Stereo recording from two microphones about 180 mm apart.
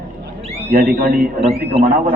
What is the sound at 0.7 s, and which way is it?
Speech, 55° right (ahead or behind).